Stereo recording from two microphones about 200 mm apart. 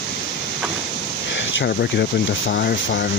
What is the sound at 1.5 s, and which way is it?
Speech, 55° left (ahead or behind).